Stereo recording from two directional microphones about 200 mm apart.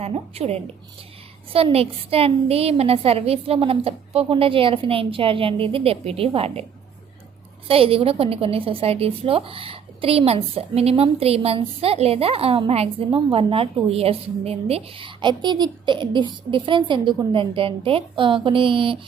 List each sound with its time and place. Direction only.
0.0 s a woman's voice: 30° right (ahead or behind)
7.7 s a woman's voice: 30° right (ahead or behind)